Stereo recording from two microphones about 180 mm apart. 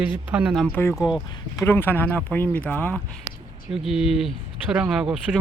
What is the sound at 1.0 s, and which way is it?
Speech, 5° right (ahead or behind).